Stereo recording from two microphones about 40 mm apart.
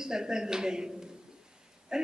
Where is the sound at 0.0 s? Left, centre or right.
Centre.